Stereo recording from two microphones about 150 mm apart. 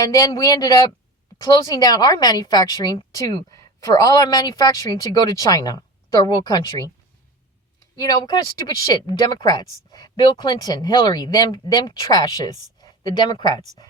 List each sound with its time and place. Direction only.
0.1 s a woman's voice: 25° left (ahead or behind)
7.9 s a woman's voice: 25° left (ahead or behind)